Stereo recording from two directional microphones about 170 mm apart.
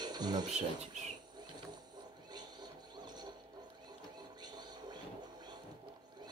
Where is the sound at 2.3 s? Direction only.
25° right (ahead or behind).